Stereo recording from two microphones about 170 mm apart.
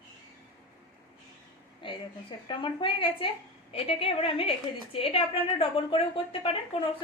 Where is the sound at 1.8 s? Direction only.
30° left (ahead or behind).